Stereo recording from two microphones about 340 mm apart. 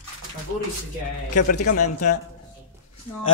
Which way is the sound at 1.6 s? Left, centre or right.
Left.